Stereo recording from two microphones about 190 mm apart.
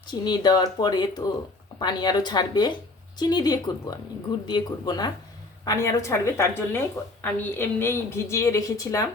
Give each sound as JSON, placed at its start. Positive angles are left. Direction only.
{"t": 0.1, "sound": "a woman's voice", "side_deg": 20}